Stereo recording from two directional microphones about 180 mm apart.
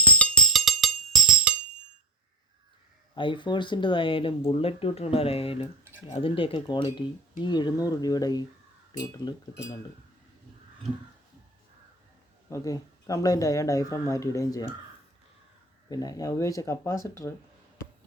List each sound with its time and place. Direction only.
0.0 s music: 5° left (ahead or behind)
3.2 s speech: 25° left (ahead or behind)
12.5 s speech: 15° left (ahead or behind)
15.9 s speech: 20° left (ahead or behind)